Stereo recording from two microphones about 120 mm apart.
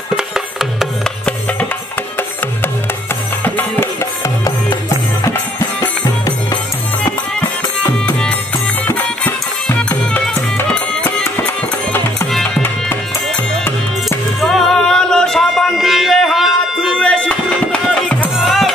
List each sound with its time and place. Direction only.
0.1 s music: 5° right (ahead or behind)
3.4 s music: 20° left (ahead or behind)
5.8 s music: 35° left (ahead or behind)
8.1 s music: 10° left (ahead or behind)
14.0 s music: centre (ahead or behind)
17.0 s music: 10° left (ahead or behind)